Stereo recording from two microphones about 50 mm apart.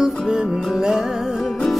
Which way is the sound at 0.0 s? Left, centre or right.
Centre.